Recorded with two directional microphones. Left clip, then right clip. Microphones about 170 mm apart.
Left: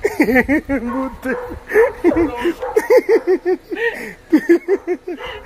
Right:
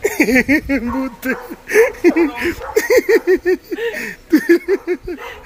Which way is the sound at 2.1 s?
35° right (ahead or behind).